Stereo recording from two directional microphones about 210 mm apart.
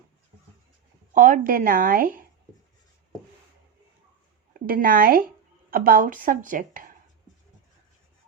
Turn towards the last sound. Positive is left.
turn(degrees=-40)  # may be behind; listen again after turning